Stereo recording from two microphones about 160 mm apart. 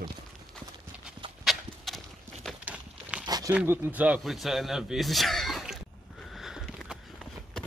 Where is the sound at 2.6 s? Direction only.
5° right (ahead or behind).